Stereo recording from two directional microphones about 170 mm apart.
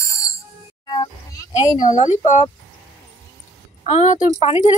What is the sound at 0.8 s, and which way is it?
Music, 25° left (ahead or behind).